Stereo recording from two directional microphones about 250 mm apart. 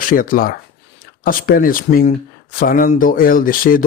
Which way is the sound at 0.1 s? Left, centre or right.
Left.